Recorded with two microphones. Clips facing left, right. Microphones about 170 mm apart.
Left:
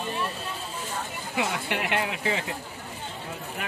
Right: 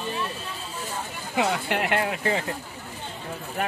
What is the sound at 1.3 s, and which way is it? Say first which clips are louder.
Speech: right 4 dB; 50° right (ahead or behind).